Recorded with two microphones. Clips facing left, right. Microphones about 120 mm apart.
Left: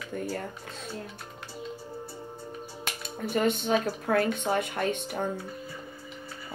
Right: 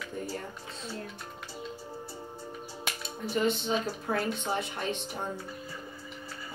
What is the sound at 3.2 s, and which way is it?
A woman's voice, 55° left (ahead or behind).